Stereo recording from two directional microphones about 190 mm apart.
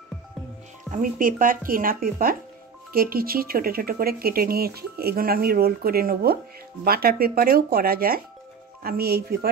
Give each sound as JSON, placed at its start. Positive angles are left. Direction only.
{"t": 0.9, "sound": "speech", "side_deg": -45}